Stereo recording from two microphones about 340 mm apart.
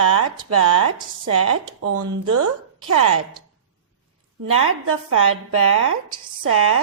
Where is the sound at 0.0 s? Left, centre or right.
Right.